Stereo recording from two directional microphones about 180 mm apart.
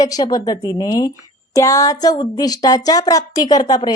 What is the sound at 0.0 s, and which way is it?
Speech, 20° left (ahead or behind).